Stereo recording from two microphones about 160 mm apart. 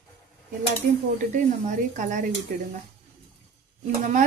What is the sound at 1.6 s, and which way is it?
Speech, 55° right (ahead or behind).